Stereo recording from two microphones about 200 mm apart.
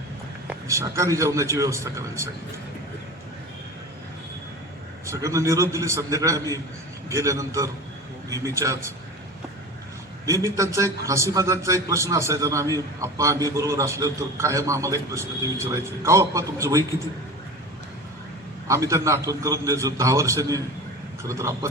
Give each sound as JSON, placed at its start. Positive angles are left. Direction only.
{"t": 0.4, "sound": "a man's voice", "side_deg": -10}
{"t": 5.0, "sound": "a man's voice", "side_deg": -15}
{"t": 10.2, "sound": "a man's voice", "side_deg": -15}
{"t": 18.7, "sound": "a man's voice", "side_deg": -15}